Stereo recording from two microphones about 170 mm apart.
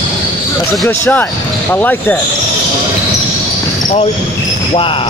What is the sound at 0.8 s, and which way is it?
Speech, 10° left (ahead or behind).